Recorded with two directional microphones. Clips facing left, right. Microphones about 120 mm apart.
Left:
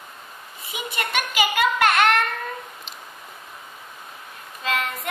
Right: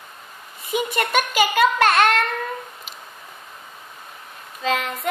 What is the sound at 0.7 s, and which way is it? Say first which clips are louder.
A child's voice: right 6 dB; 45° right (ahead or behind).